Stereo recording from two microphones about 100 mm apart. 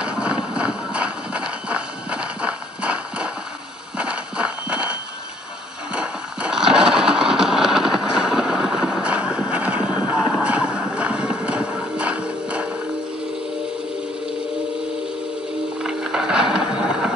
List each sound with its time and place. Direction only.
0.0 s clip-clop: 10° right (ahead or behind)
4.0 s horse: 10° right (ahead or behind)
5.9 s engine: 10° right (ahead or behind)
10.4 s clip-clop: 10° right (ahead or behind)
15.8 s music: 5° right (ahead or behind)